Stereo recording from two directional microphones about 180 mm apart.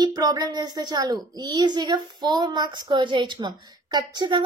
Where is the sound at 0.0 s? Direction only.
20° right (ahead or behind).